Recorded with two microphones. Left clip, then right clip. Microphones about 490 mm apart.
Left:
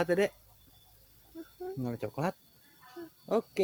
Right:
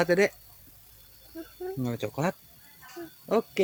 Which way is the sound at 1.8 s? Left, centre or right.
Left.